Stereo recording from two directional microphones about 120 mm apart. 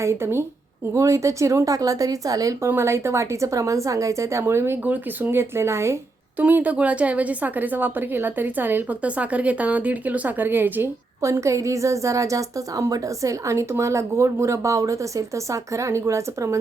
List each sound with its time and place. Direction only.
0.0 s speech: 20° right (ahead or behind)
6.4 s a woman's voice: 10° right (ahead or behind)